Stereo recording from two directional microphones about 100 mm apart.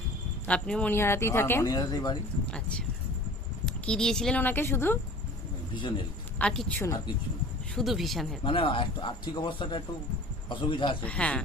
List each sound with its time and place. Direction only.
0.4 s speech: 10° left (ahead or behind)
0.9 s speech: 25° left (ahead or behind)
1.6 s speech: 40° left (ahead or behind)
2.5 s speech: 10° left (ahead or behind)
3.8 s speech: 5° left (ahead or behind)
4.4 s speech: 20° left (ahead or behind)
5.7 s speech: 55° left (ahead or behind)
6.4 s speech: 5° left (ahead or behind)
7.8 s speech: centre (ahead or behind)
8.4 s speech: 60° left (ahead or behind)
11.0 s speech: 15° left (ahead or behind)